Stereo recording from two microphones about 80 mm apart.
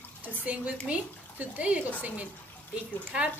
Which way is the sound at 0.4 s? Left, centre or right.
Centre.